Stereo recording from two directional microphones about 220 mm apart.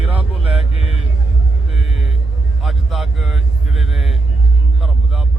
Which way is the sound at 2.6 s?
Centre (ahead or behind).